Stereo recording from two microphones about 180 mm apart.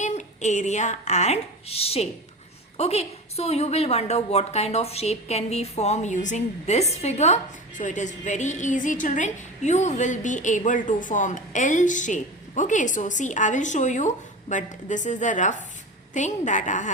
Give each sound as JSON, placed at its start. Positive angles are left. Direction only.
{"t": 0.0, "sound": "a woman's voice", "side_deg": 40}